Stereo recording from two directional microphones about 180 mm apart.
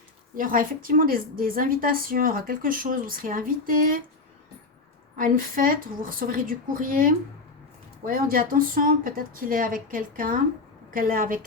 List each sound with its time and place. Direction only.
0.3 s a woman's voice: 50° right (ahead or behind)
5.1 s a woman's voice: 50° right (ahead or behind)